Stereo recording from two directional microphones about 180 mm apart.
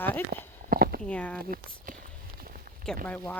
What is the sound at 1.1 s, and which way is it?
Speech, 5° left (ahead or behind).